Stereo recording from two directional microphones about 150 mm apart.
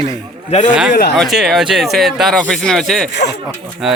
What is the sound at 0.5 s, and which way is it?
Speech, 45° left (ahead or behind).